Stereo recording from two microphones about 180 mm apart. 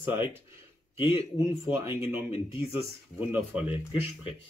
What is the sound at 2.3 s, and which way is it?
Speech, 30° left (ahead or behind).